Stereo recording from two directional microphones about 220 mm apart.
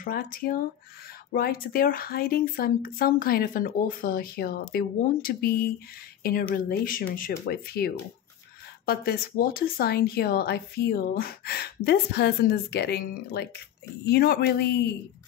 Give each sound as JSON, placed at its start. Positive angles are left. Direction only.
{"t": 0.0, "sound": "speech", "side_deg": 40}